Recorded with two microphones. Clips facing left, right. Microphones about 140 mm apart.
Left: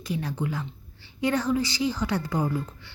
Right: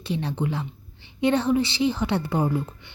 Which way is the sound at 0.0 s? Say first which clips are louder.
Right 3 dB; 25° right (ahead or behind).